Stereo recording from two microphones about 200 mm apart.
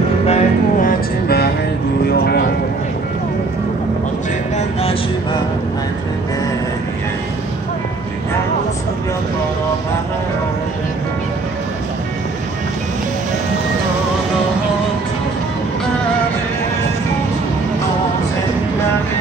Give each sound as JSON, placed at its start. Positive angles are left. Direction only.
{"t": 0.3, "sound": "music", "side_deg": 45}